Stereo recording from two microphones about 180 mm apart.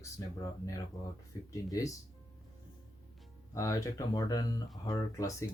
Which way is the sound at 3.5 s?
15° left (ahead or behind).